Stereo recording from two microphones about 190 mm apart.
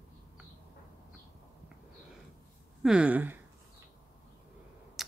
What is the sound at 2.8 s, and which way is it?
Speech, 5° right (ahead or behind).